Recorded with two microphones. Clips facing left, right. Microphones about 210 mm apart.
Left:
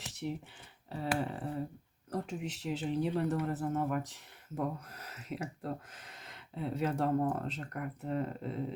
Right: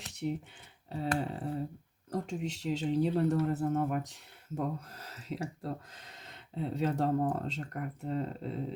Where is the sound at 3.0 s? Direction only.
30° right (ahead or behind).